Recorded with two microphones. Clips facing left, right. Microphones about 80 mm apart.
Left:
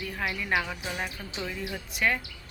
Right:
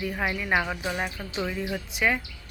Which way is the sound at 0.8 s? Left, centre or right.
Right.